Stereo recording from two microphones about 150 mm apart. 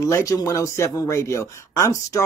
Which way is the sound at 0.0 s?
20° left (ahead or behind).